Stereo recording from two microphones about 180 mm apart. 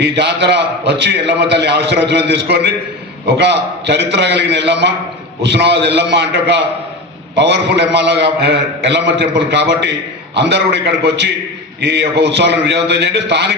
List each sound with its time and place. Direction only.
0.0 s a man's voice: 70° right (ahead or behind)